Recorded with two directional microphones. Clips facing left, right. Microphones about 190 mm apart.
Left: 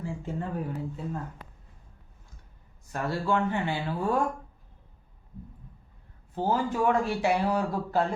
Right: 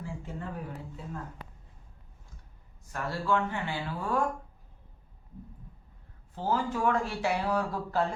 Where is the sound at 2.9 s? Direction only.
20° left (ahead or behind).